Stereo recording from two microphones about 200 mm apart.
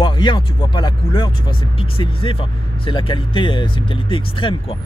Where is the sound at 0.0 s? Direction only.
25° left (ahead or behind).